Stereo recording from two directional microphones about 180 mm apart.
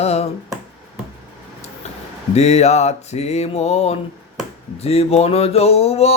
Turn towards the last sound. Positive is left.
turn(degrees=35)  # may be behind; listen again after turning